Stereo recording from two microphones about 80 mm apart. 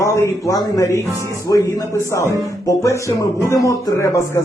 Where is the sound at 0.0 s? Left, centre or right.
Left.